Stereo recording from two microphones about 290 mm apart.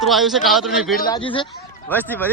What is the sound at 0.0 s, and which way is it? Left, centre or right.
Speech, centre.